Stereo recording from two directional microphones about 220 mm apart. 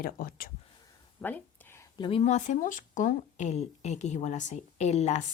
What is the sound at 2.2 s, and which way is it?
Speech, 30° left (ahead or behind).